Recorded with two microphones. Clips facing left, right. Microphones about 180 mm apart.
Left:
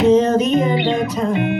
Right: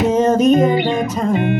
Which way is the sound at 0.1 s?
45° right (ahead or behind).